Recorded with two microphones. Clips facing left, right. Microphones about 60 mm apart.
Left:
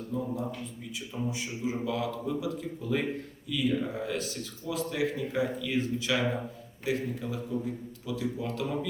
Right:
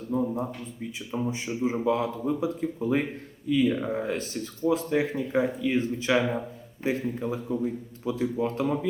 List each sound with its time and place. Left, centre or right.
0.1 s speech: right